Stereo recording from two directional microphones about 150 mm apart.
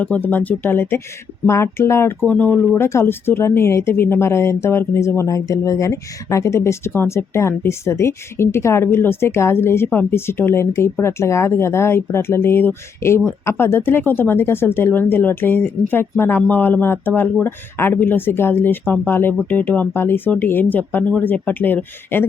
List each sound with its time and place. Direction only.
0.0 s speech: 10° left (ahead or behind)